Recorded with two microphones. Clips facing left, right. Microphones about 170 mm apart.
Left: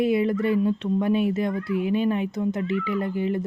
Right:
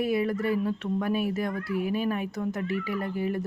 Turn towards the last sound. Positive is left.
turn(degrees=20)  # may be behind; listen again after turning